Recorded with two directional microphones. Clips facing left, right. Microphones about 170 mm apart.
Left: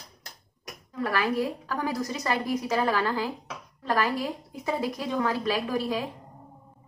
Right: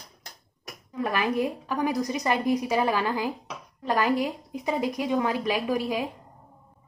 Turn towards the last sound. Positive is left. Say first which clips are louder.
# right 1 dB
turn(degrees=-15)  # may be behind; listen again after turning